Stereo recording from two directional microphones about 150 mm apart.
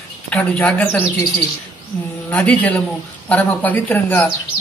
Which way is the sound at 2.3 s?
5° left (ahead or behind).